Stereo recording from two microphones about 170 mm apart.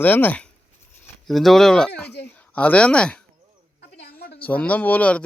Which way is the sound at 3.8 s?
75° left (ahead or behind).